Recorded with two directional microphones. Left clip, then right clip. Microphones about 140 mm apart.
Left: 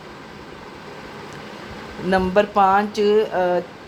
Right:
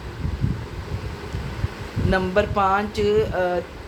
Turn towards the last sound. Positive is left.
turn(degrees=45)  # may be behind; listen again after turning